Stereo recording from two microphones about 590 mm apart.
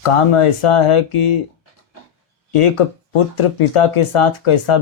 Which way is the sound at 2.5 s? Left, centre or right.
Left.